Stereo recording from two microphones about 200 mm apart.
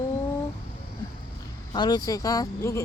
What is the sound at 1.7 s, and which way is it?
Speech, 20° left (ahead or behind).